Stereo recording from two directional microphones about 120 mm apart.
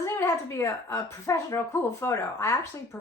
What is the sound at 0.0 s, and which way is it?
A woman's voice, 25° left (ahead or behind).